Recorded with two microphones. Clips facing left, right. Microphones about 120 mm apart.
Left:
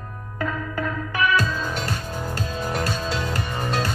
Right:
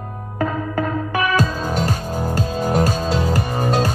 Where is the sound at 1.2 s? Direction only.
40° right (ahead or behind).